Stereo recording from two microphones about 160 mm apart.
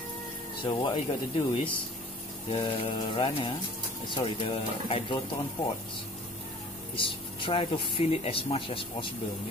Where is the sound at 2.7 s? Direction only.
35° left (ahead or behind).